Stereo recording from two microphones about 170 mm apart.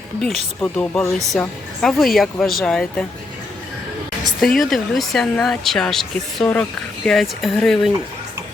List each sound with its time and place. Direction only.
0.2 s speech: centre (ahead or behind)
4.4 s speech: centre (ahead or behind)